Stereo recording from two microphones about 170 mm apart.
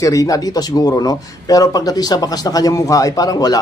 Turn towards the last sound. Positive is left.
turn(degrees=20)  # may be behind; listen again after turning